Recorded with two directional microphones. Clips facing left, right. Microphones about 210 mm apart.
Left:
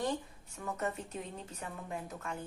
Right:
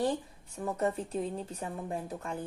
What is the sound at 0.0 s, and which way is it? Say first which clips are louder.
A woman's voice: right 5 dB; 35° right (ahead or behind).